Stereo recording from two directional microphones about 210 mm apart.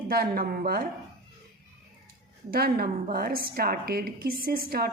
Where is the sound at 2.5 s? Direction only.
45° right (ahead or behind).